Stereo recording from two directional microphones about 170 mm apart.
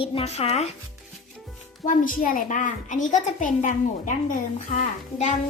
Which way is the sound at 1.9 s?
50° left (ahead or behind).